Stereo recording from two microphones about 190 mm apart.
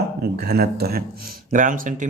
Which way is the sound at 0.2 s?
55° right (ahead or behind).